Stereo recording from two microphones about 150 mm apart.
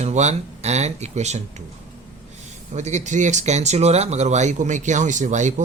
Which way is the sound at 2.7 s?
50° right (ahead or behind).